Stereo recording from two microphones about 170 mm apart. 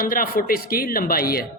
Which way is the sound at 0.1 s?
55° left (ahead or behind).